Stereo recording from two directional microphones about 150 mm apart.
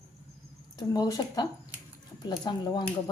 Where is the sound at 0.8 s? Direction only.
25° left (ahead or behind).